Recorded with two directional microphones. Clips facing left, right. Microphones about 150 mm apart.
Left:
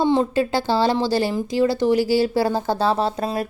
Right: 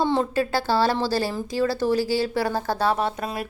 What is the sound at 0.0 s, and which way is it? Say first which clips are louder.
A woman's voice: left 4 dB; 20° left (ahead or behind).